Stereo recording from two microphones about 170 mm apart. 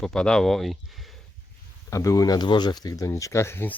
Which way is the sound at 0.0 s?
5° left (ahead or behind).